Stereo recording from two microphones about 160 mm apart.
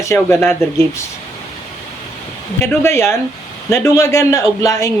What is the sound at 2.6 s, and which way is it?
A man's voice, 15° left (ahead or behind).